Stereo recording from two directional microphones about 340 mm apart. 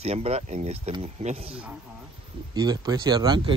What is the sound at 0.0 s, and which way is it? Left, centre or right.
Speech, centre.